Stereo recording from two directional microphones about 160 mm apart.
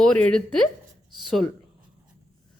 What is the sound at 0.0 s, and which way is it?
Speech, 5° left (ahead or behind).